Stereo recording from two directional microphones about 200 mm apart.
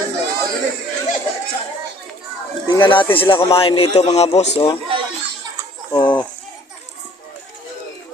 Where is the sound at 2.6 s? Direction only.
25° left (ahead or behind).